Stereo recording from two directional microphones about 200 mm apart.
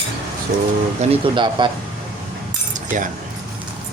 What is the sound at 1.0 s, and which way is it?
Speech, 25° right (ahead or behind).